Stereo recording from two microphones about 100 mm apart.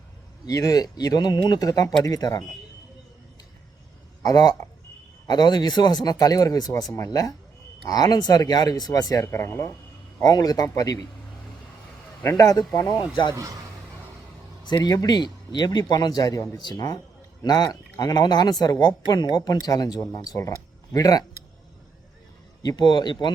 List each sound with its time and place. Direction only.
0.4 s speech: 35° left (ahead or behind)
4.2 s speech: 40° left (ahead or behind)
10.2 s speech: 40° left (ahead or behind)
12.2 s speech: 30° left (ahead or behind)
14.7 s speech: 40° left (ahead or behind)
16.6 s speech: 45° left (ahead or behind)
22.6 s speech: 45° left (ahead or behind)